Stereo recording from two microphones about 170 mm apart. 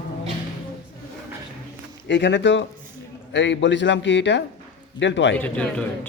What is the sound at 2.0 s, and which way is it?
A man's voice, 90° left.